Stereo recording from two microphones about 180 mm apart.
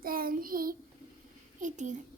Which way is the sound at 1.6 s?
40° right (ahead or behind).